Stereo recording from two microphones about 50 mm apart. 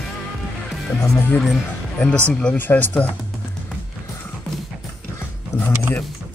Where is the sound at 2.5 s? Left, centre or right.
Left.